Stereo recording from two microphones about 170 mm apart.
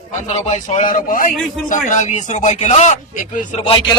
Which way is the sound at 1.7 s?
45° left (ahead or behind).